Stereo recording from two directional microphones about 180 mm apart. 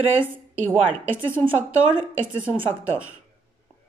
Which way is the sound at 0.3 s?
10° right (ahead or behind).